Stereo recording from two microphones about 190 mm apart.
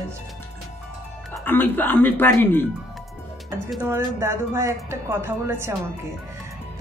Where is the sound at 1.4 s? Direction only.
10° left (ahead or behind).